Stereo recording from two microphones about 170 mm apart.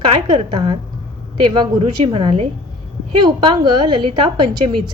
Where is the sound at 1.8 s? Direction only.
30° right (ahead or behind).